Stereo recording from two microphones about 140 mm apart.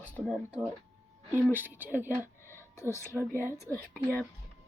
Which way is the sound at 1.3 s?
15° right (ahead or behind).